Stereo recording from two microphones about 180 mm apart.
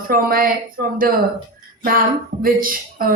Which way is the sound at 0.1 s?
55° right (ahead or behind).